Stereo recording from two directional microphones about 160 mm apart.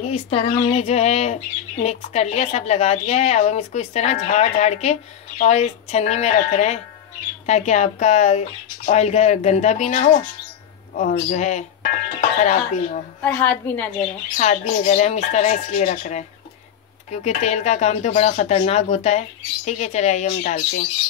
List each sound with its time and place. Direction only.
0.0 s speech: 40° left (ahead or behind)
13.2 s a woman's voice: 10° left (ahead or behind)
14.3 s speech: 50° left (ahead or behind)